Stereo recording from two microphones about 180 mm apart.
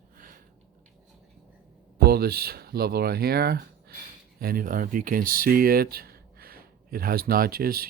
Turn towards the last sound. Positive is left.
turn(degrees=-55)  # may be behind; listen again after turning